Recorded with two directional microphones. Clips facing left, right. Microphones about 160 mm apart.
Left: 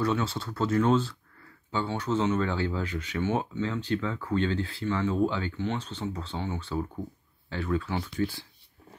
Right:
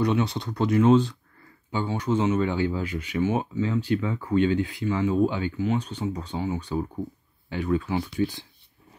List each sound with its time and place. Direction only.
0.0 s speech: 15° right (ahead or behind)